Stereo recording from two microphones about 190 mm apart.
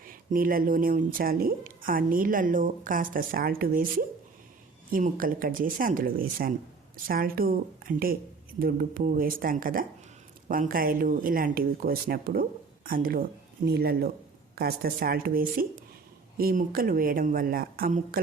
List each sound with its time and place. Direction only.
0.0 s a woman's voice: 45° right (ahead or behind)